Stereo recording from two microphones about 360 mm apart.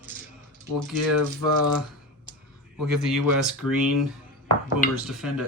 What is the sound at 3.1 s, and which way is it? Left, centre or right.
Speech, centre.